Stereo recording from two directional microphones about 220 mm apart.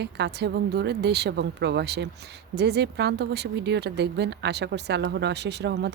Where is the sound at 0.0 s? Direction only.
50° right (ahead or behind).